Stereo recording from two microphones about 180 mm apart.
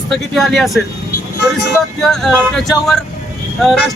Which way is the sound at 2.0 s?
Centre (ahead or behind).